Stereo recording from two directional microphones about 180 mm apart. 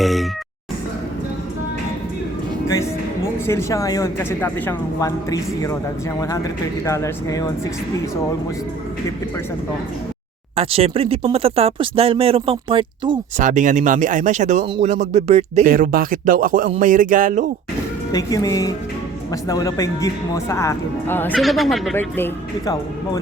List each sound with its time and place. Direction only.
0.0 s a sound: centre (ahead or behind)
3.4 s a woman's voice: 15° left (ahead or behind)
10.5 s speech: 35° right (ahead or behind)
13.3 s speech: 40° right (ahead or behind)
15.6 s speech: 50° right (ahead or behind)
18.1 s a woman's voice: 20° left (ahead or behind)
21.3 s speech: centre (ahead or behind)
21.9 s speech: 10° left (ahead or behind)